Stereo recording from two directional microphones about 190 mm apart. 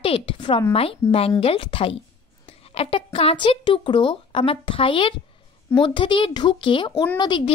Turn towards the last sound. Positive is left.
turn(degrees=25)  # may be behind; listen again after turning